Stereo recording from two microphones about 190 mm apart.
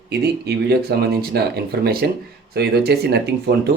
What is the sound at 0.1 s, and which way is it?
Speech, 60° right (ahead or behind).